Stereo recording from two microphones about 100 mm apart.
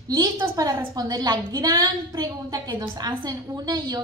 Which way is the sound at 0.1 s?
40° right (ahead or behind).